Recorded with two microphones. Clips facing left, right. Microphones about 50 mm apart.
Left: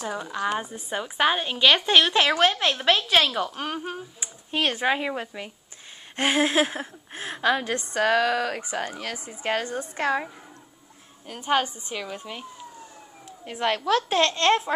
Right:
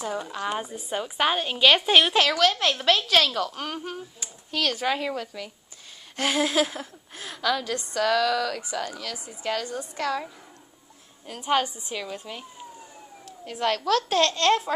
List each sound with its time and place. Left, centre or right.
0.1 s a woman's voice: centre
2.5 s a woman's voice: centre; by 10.3 s left
11.2 s a woman's voice: centre
13.5 s speech: left